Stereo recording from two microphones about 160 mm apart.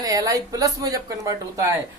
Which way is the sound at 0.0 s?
25° right (ahead or behind).